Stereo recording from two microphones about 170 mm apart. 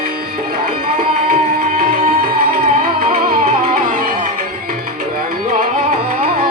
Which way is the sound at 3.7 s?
55° right (ahead or behind).